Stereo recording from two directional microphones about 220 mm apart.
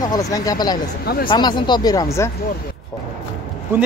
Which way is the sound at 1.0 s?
40° left (ahead or behind).